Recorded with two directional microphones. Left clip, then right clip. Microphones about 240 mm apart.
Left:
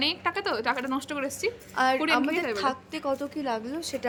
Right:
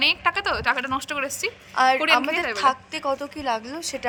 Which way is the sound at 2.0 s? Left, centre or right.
Centre.